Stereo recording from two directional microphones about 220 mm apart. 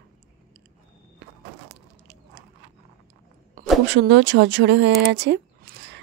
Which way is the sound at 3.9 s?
50° right (ahead or behind).